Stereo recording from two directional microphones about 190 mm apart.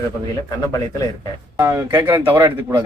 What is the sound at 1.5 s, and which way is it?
A man's voice, 15° right (ahead or behind).